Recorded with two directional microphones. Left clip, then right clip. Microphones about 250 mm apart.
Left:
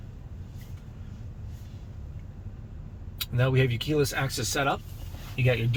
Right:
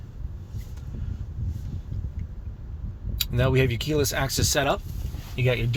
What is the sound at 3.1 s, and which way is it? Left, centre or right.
Speech, right.